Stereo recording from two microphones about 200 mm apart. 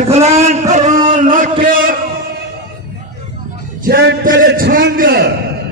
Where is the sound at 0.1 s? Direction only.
30° right (ahead or behind).